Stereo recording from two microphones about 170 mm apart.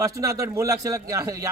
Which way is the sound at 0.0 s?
20° right (ahead or behind).